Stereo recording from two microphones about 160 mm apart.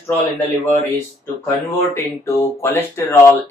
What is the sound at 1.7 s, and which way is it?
Speech, 15° left (ahead or behind).